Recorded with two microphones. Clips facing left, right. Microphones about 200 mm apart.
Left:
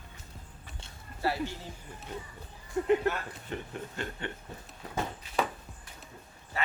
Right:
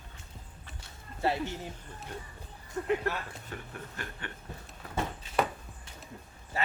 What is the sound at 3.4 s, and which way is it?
Chuckle, 25° left (ahead or behind).